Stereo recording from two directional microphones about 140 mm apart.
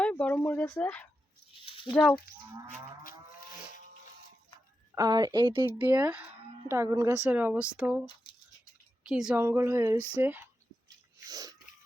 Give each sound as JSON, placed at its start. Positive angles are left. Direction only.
{"t": 0.0, "sound": "speech", "side_deg": 10}
{"t": 1.6, "sound": "a sound", "side_deg": 40}
{"t": 4.9, "sound": "a woman's voice", "side_deg": -30}
{"t": 5.8, "sound": "speech", "side_deg": -10}
{"t": 7.3, "sound": "speech", "side_deg": -10}
{"t": 9.0, "sound": "speech", "side_deg": -5}
{"t": 9.4, "sound": "speech", "side_deg": -15}
{"t": 10.8, "sound": "a sound", "side_deg": -25}